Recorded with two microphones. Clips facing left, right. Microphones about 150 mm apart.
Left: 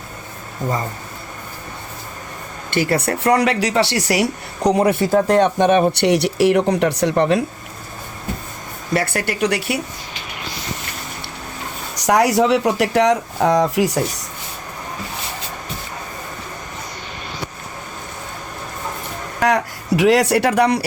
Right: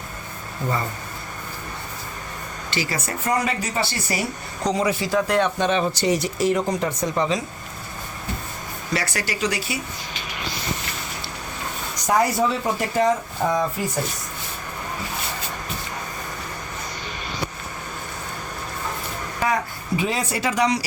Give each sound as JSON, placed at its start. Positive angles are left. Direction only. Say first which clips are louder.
{"t": 2.6, "sound": "speech", "louder": "left 9 dB", "side_deg": 55}
{"t": 8.9, "sound": "speech", "louder": "left 6 dB", "side_deg": 55}
{"t": 11.9, "sound": "speech", "louder": "left 5 dB", "side_deg": 75}
{"t": 19.4, "sound": "speech", "louder": "left 6 dB", "side_deg": 80}